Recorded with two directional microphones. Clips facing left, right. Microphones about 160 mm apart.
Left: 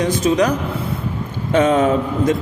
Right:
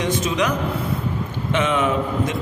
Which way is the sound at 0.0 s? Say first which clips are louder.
Left 5 dB; 35° left (ahead or behind).